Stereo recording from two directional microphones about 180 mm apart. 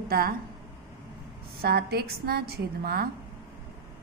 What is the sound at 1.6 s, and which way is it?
A woman's voice, 60° right (ahead or behind).